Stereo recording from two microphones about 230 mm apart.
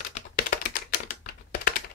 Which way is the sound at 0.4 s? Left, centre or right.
Left.